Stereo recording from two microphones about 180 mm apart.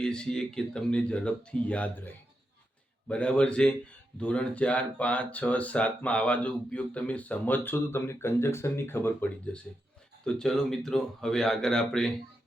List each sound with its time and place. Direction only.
0.0 s speech: 5° left (ahead or behind)